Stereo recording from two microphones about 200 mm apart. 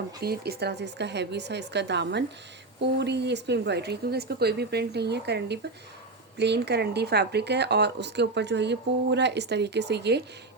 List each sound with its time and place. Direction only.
0.2 s speech: 50° right (ahead or behind)